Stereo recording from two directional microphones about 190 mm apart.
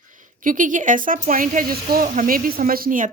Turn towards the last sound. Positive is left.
turn(degrees=-45)  # may be behind; listen again after turning